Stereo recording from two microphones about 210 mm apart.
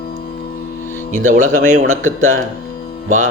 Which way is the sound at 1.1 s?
40° right (ahead or behind).